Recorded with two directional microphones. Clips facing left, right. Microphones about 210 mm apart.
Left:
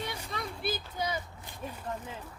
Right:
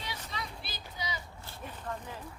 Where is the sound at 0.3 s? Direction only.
50° left (ahead or behind).